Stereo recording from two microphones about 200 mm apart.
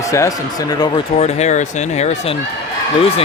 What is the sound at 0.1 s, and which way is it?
Speech, 15° left (ahead or behind).